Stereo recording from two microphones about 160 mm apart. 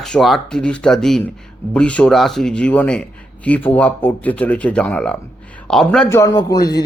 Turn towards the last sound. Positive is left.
turn(degrees=25)  # may be behind; listen again after turning